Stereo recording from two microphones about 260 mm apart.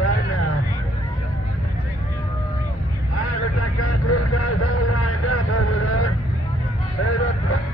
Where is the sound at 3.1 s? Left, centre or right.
Left.